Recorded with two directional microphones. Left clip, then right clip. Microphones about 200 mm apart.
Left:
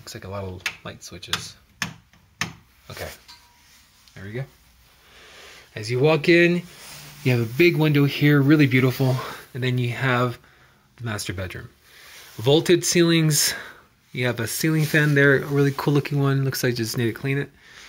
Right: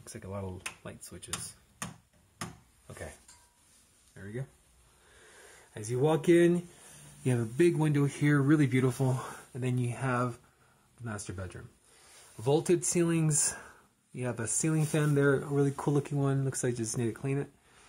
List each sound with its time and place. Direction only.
0.0 s speech: 20° right (ahead or behind)
4.1 s speech: 10° right (ahead or behind)
13.4 s speech: 10° left (ahead or behind)
14.1 s speech: 5° right (ahead or behind)